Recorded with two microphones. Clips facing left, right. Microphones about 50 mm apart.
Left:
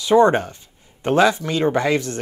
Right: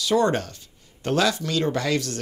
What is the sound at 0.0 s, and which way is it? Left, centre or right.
Speech, left.